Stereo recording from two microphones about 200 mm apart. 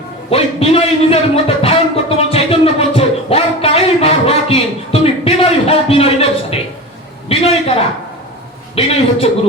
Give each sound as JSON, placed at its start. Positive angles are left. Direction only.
{"t": 0.3, "sound": "speech", "side_deg": 30}
{"t": 7.3, "sound": "a sound", "side_deg": 30}
{"t": 8.7, "sound": "a man's voice", "side_deg": 30}